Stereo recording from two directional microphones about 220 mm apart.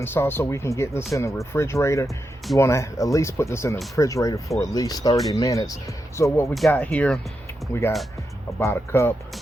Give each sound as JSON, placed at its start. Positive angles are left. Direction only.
{"t": 0.0, "sound": "speech", "side_deg": 10}